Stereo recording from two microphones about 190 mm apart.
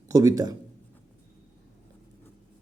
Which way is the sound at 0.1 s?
15° right (ahead or behind).